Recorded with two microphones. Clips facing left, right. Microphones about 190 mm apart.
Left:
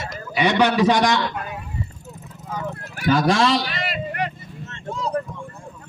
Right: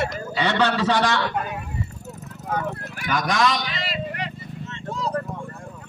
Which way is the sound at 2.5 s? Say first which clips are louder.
Right 4 dB; 60° right (ahead or behind).